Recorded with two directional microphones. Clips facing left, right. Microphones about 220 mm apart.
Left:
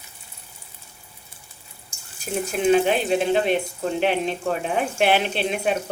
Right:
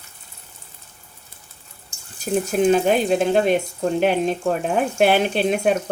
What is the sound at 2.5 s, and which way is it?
Speech, 40° right (ahead or behind).